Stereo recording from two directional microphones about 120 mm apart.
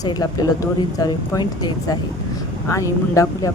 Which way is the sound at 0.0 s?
35° left (ahead or behind).